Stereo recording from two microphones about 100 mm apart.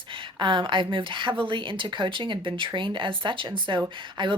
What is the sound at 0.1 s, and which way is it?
A woman's voice, 55° right (ahead or behind).